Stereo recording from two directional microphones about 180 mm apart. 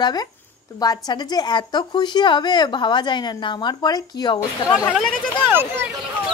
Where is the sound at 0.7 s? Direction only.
20° left (ahead or behind).